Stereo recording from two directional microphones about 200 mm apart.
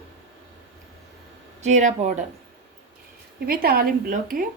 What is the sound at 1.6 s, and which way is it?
Speech, 35° right (ahead or behind).